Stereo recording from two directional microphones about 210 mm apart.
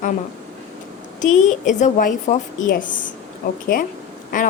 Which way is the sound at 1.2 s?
35° left (ahead or behind).